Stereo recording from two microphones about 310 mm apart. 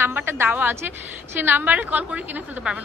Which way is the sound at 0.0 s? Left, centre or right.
Centre.